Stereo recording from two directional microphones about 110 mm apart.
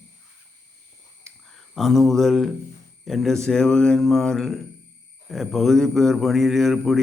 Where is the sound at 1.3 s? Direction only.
Centre (ahead or behind).